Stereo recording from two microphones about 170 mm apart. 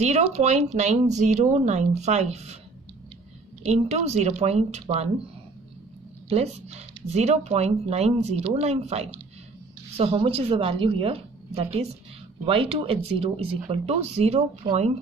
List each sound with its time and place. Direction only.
0.0 s speech: 40° right (ahead or behind)
3.7 s speech: 40° right (ahead or behind)
6.2 s speech: 40° right (ahead or behind)
14.6 s speech: 25° right (ahead or behind)